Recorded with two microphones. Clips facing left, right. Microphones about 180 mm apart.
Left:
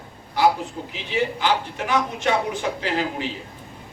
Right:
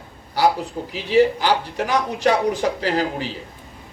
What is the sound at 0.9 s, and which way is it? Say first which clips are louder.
Speech: right 9 dB; 35° right (ahead or behind).